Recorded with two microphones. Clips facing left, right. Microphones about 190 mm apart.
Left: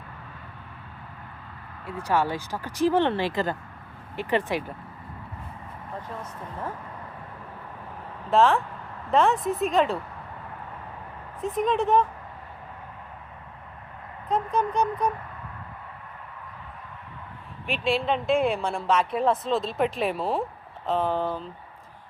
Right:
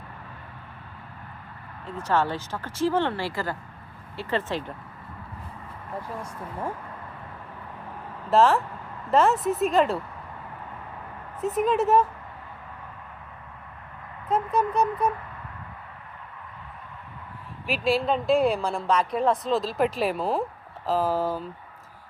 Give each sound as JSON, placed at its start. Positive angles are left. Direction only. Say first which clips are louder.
{"t": 2.0, "sound": "speech", "louder": "even", "side_deg": 10}
{"t": 6.0, "sound": "speech", "louder": "right 3 dB", "side_deg": -10}
{"t": 8.3, "sound": "speech", "louder": "right 1 dB", "side_deg": 0}
{"t": 11.3, "sound": "speech", "louder": "right 2 dB", "side_deg": -5}
{"t": 14.3, "sound": "speech", "louder": "right 1 dB", "side_deg": -5}
{"t": 17.7, "sound": "speech", "louder": "right 1 dB", "side_deg": 0}